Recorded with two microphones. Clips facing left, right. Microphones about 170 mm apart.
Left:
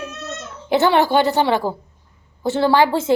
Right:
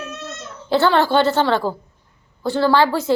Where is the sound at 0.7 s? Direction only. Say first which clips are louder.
Left 1 dB; 15° left (ahead or behind).